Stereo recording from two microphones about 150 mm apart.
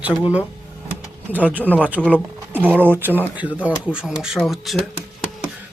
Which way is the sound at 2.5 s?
10° right (ahead or behind).